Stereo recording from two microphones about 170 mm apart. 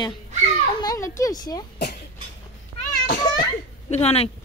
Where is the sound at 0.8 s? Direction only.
20° left (ahead or behind).